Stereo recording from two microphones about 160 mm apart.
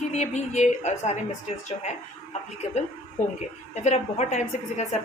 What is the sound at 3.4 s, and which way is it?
A woman's voice, 45° left (ahead or behind).